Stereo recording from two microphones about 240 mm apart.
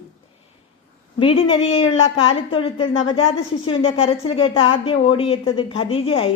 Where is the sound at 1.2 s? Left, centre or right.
Left.